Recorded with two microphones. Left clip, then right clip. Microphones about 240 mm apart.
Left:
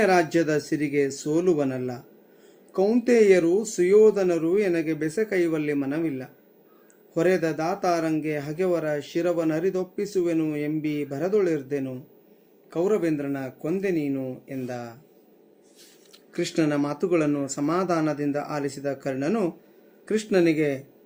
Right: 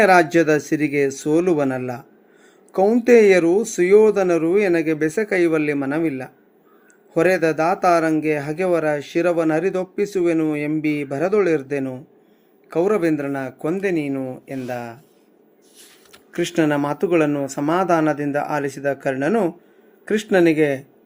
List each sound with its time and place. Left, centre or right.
0.0 s speech: centre
3.1 s speech: centre
12.7 s speech: centre
16.3 s speech: centre
17.4 s speech: centre